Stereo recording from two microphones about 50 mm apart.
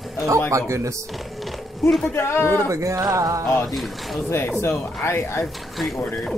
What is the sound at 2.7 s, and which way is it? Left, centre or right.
Music, right.